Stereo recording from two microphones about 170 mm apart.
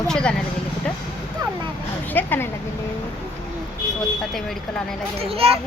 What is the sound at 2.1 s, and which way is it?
Speech, 10° left (ahead or behind).